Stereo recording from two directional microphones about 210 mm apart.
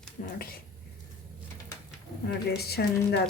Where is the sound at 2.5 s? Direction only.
50° left (ahead or behind).